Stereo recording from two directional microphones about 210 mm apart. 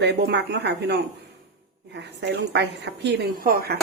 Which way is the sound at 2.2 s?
55° right (ahead or behind).